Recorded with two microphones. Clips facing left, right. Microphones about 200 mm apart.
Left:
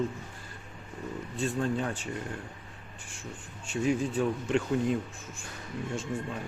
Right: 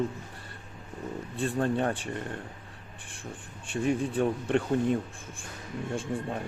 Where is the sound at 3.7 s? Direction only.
55° right (ahead or behind).